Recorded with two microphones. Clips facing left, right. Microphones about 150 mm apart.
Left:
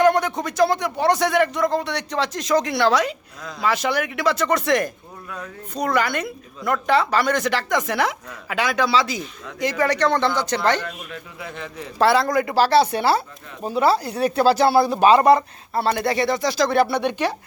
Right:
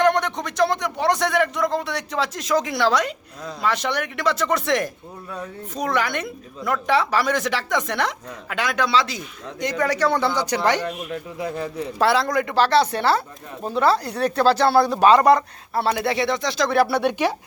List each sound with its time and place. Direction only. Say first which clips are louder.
0.0 s speech: left 2 dB; 5° left (ahead or behind); by 10.8 s 15° right (ahead or behind)
10.8 s speech: right 5 dB; 35° right (ahead or behind)
11.9 s speech: left 2 dB; centre (ahead or behind)